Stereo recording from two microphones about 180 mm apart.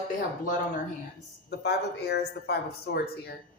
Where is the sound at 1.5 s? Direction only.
65° left (ahead or behind).